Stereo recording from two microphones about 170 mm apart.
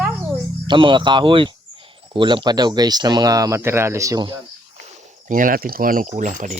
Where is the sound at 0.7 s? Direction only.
30° right (ahead or behind).